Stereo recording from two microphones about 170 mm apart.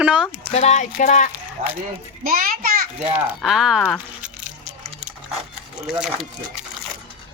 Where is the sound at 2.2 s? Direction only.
55° right (ahead or behind).